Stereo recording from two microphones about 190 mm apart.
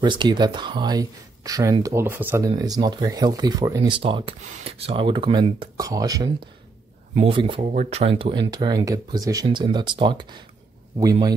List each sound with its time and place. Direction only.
0.0 s speech: 25° right (ahead or behind)
7.7 s speech: 40° right (ahead or behind); by 11.3 s 20° right (ahead or behind)